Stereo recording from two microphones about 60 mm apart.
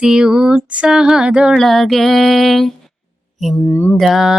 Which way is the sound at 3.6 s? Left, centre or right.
Left.